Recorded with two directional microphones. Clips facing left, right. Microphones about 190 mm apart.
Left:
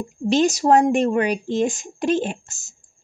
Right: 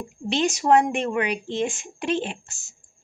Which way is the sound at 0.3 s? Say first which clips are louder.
Left 3 dB; 40° left (ahead or behind).